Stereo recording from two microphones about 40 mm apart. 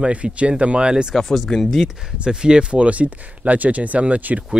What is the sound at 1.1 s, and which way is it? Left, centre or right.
Speech, centre.